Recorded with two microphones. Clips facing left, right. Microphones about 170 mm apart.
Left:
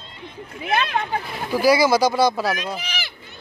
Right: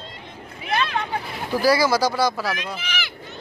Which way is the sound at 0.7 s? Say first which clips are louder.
Left 2 dB; 45° left (ahead or behind).